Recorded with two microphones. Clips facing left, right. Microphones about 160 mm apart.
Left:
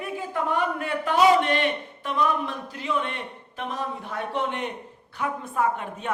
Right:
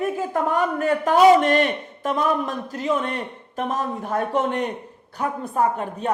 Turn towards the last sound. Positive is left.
turn(degrees=-40)  # may be behind; listen again after turning